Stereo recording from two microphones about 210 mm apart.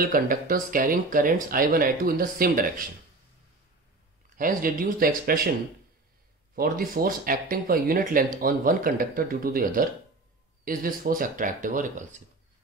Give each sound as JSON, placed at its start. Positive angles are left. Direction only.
{"t": 0.0, "sound": "speech", "side_deg": -40}
{"t": 4.4, "sound": "speech", "side_deg": -40}
{"t": 6.5, "sound": "speech", "side_deg": -45}